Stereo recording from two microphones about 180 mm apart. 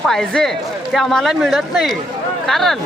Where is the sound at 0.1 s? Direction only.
Centre (ahead or behind).